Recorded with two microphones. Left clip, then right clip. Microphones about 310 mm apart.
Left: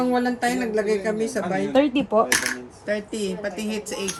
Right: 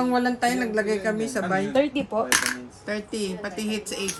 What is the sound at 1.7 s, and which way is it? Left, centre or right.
Speech, centre.